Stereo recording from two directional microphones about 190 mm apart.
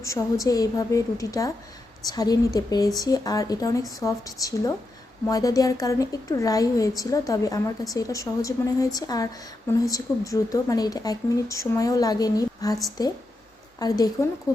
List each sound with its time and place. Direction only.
0.0 s a woman's voice: 15° left (ahead or behind)